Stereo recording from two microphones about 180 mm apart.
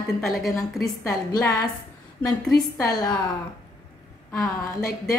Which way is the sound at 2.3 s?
20° left (ahead or behind).